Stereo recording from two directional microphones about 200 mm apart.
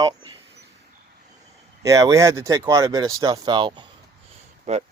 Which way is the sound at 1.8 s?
15° right (ahead or behind).